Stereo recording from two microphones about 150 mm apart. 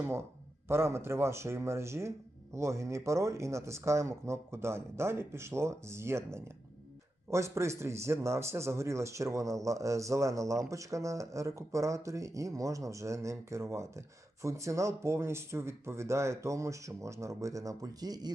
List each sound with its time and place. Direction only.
0.7 s a man's voice: 15° right (ahead or behind)